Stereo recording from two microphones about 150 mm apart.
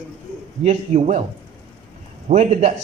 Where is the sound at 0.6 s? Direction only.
50° right (ahead or behind).